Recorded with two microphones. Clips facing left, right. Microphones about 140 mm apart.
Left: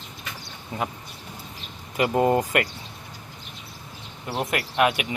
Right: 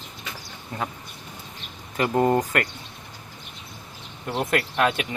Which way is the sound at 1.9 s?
10° left (ahead or behind).